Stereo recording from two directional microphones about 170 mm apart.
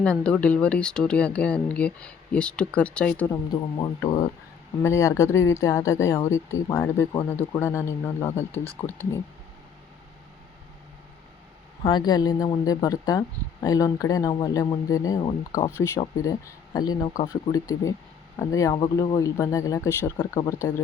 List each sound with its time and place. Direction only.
0.0 s speech: 5° left (ahead or behind)
3.5 s speech: 25° left (ahead or behind)
11.8 s speech: 25° left (ahead or behind)